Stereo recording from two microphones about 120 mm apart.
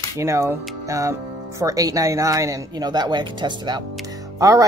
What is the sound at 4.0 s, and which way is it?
Music, 30° right (ahead or behind).